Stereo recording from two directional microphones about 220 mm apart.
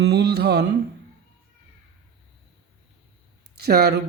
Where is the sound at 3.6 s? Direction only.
45° right (ahead or behind).